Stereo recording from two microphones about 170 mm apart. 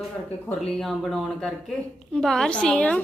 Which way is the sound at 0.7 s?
Centre (ahead or behind).